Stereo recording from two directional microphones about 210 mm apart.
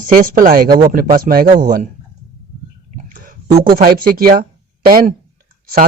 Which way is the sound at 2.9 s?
40° right (ahead or behind).